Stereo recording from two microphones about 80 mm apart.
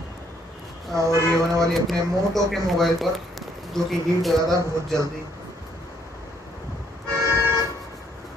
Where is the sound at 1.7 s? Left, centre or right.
Centre.